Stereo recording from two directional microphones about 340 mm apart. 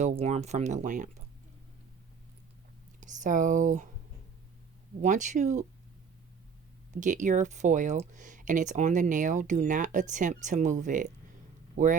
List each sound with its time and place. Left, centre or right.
0.0 s speech: centre
3.0 s speech: right
5.0 s speech: right
6.9 s speech: right